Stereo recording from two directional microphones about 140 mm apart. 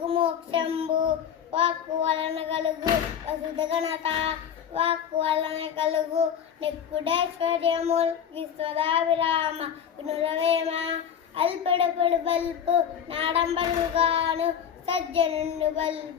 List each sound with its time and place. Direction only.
0.0 s child singing: 40° right (ahead or behind)